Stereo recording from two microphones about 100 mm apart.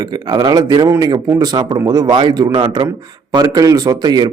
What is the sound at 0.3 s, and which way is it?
A man's voice, 40° right (ahead or behind).